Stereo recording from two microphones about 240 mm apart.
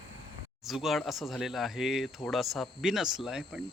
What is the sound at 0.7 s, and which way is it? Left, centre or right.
Speech, centre.